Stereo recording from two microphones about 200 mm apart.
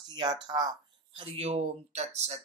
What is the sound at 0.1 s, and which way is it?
Speech, 20° right (ahead or behind).